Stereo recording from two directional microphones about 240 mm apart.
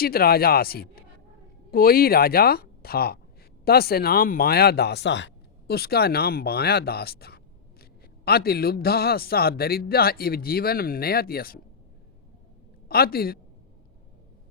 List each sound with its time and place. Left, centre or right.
0.0 s speech: left
12.9 s speech: left